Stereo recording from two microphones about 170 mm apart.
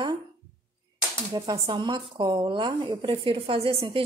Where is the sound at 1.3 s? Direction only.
25° right (ahead or behind).